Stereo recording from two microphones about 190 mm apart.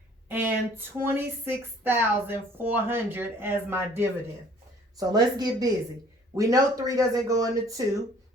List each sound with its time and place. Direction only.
0.3 s a woman's voice: 10° right (ahead or behind)